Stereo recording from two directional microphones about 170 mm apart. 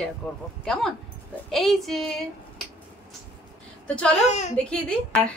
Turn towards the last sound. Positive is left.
turn(degrees=5)  # may be behind; listen again after turning